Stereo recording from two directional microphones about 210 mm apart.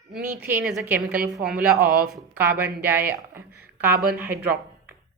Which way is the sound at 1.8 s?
45° right (ahead or behind).